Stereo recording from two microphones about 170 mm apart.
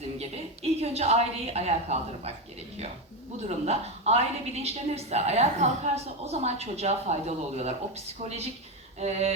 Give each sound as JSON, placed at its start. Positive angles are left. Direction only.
{"t": 0.2, "sound": "a woman's voice", "side_deg": -40}
{"t": 3.4, "sound": "a woman's voice", "side_deg": -40}
{"t": 9.0, "sound": "a woman's voice", "side_deg": -40}